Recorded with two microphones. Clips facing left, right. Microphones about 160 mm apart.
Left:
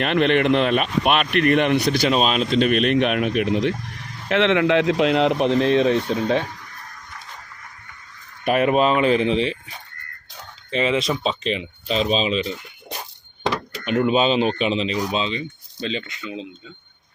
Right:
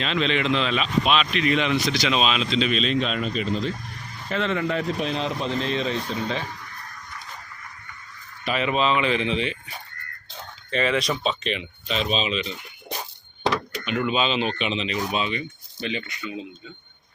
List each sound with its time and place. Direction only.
0.0 s speech: 60° left (ahead or behind)
8.4 s speech: 50° left (ahead or behind); by 9.6 s 35° left (ahead or behind)
10.7 s speech: 20° left (ahead or behind); by 12.5 s 35° left (ahead or behind)
13.8 s speech: 40° left (ahead or behind)
14.9 s speech: 20° left (ahead or behind)